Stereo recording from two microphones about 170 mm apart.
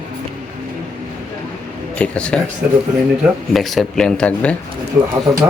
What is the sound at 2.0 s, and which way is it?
Speech, 5° left (ahead or behind).